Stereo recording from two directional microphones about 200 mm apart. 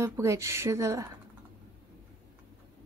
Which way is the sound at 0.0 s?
15° right (ahead or behind).